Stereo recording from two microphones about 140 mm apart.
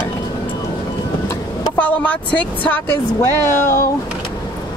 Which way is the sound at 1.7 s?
10° left (ahead or behind).